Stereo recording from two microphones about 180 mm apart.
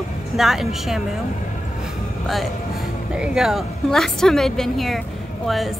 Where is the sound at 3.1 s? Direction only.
5° right (ahead or behind).